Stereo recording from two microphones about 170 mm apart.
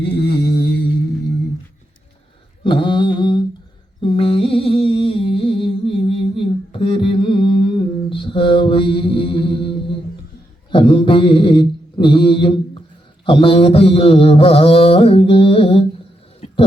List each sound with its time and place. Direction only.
0.0 s a sound: 80° left
2.6 s mantra: 30° left (ahead or behind)
4.0 s humming: 30° left (ahead or behind)
8.1 s mantra: 30° left (ahead or behind)